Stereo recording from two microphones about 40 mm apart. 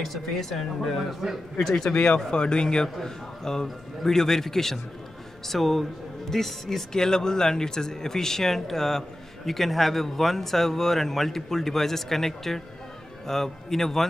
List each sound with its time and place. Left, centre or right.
0.0 s speech: centre
0.9 s a man's voice: centre
1.6 s speech: centre
1.9 s a man's voice: left; by 14.0 s centre